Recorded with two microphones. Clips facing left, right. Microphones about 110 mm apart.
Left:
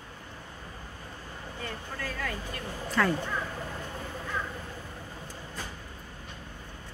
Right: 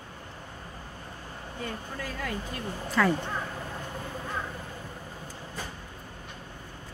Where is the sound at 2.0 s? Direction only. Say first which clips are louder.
Even; 20° right (ahead or behind).